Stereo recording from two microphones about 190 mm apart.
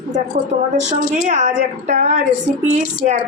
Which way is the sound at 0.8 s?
40° right (ahead or behind).